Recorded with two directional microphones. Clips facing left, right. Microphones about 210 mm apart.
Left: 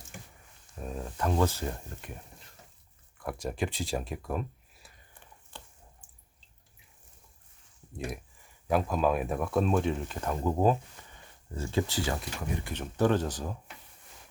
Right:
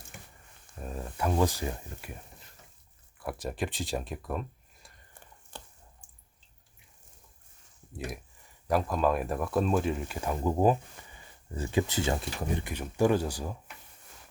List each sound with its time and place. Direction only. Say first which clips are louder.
0.8 s speech: even; centre (ahead or behind)
1.7 s speech: even; 5° right (ahead or behind)
5.5 s a sound: right 3 dB; 40° right (ahead or behind)
8.6 s speech: even; centre (ahead or behind); by 12.6 s 30° right (ahead or behind)
12.6 s speech: even; 10° right (ahead or behind)